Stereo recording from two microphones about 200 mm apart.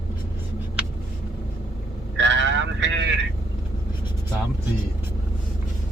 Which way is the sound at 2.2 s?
60° right (ahead or behind).